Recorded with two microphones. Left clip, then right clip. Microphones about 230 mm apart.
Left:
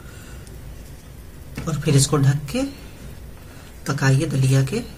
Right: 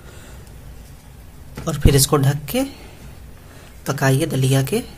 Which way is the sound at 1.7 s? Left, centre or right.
Right.